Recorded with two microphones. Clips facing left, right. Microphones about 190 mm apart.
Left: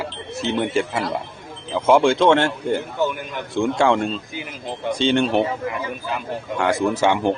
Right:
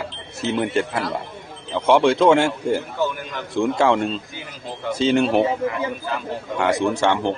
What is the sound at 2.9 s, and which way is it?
Speech, 15° left (ahead or behind).